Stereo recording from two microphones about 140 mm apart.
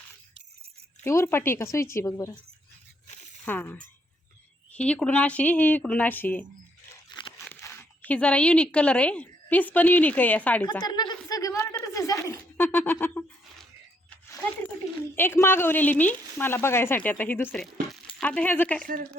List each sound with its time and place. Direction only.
1.0 s a woman's voice: 20° left (ahead or behind)
3.4 s speech: 15° left (ahead or behind)
6.9 s a sound: 35° left (ahead or behind)
7.4 s speech: 15° left (ahead or behind)
10.7 s a sound: 30° left (ahead or behind); by 13.2 s 15° left (ahead or behind)
15.1 s speech: 15° left (ahead or behind)